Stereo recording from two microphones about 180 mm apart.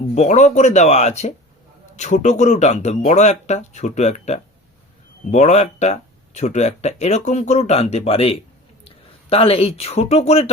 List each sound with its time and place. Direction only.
0.1 s speech: 40° left (ahead or behind)